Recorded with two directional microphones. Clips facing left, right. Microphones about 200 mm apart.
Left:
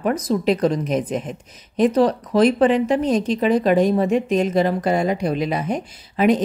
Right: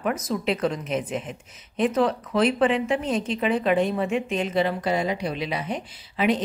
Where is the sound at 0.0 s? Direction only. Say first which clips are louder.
Left 6 dB; 35° left (ahead or behind).